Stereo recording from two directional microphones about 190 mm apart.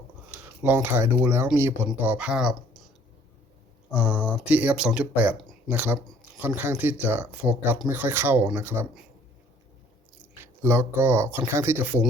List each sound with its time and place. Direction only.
0.6 s speech: 10° right (ahead or behind)
3.9 s speech: 5° right (ahead or behind)
10.4 s speech: 15° right (ahead or behind)